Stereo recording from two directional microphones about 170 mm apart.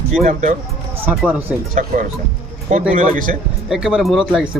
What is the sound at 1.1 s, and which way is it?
Speech, 5° right (ahead or behind).